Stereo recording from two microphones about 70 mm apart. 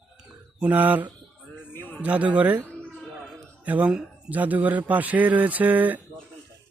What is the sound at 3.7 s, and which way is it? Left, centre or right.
Speech, centre.